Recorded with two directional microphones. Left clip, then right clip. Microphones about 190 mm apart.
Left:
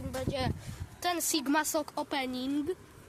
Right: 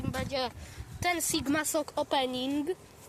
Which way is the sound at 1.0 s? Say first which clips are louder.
Right 1 dB; 15° left (ahead or behind).